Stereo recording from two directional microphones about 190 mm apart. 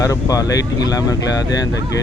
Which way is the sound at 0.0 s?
15° left (ahead or behind).